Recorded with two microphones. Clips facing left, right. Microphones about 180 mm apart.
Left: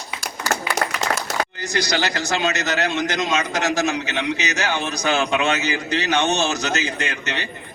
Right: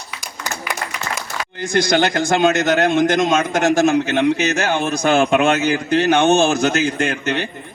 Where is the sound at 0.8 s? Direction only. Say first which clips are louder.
Left 4 dB; 85° left.